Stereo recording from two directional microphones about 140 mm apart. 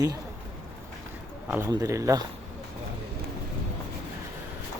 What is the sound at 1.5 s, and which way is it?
Speech, 15° right (ahead or behind).